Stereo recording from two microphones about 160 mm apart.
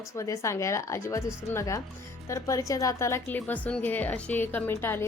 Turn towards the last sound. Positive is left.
turn(degrees=15)  # may be behind; listen again after turning